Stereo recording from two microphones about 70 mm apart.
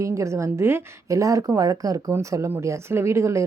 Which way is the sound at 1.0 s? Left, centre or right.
Right.